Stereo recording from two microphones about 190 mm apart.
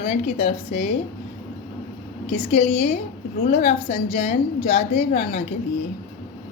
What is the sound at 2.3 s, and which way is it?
A woman's voice, 35° left (ahead or behind).